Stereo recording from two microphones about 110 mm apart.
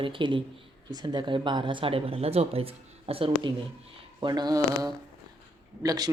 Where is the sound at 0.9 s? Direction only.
40° right (ahead or behind).